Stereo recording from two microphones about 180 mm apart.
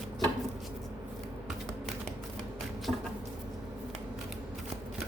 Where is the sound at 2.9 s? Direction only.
5° right (ahead or behind).